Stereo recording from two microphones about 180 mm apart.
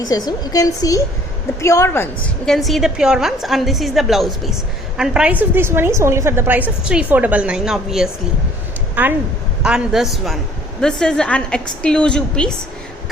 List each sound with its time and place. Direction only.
0.0 s a woman's voice: 20° left (ahead or behind)
2.5 s a woman's voice: centre (ahead or behind)